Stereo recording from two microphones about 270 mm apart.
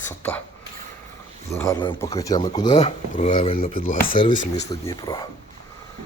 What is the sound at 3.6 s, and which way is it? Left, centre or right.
Speech, left.